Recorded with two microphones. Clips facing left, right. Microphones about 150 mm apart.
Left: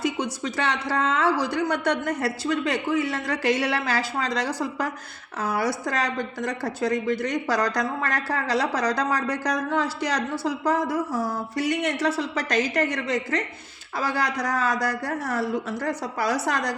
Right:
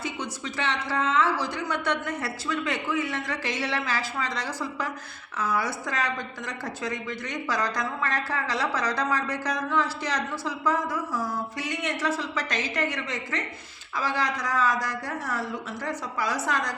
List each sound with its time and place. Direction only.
0.2 s a woman's voice: 40° left (ahead or behind)
12.2 s a woman's voice: 40° left (ahead or behind)